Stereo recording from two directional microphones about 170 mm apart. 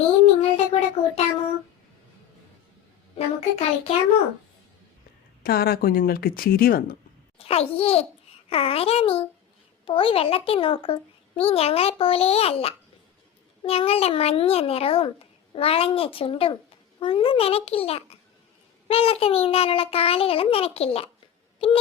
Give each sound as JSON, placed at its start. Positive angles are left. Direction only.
{"t": 0.5, "sound": "a sound", "side_deg": 40}
{"t": 3.2, "sound": "a child's voice", "side_deg": 40}
{"t": 5.4, "sound": "speech", "side_deg": 65}
{"t": 7.3, "sound": "a child's voice", "side_deg": 35}